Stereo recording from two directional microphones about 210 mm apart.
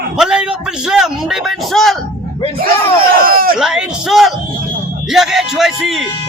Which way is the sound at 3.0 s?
45° right (ahead or behind).